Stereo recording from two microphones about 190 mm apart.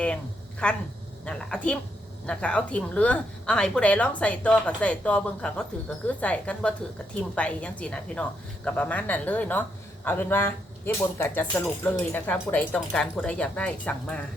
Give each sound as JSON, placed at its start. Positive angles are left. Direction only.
{"t": 0.6, "sound": "a woman's voice", "side_deg": 5}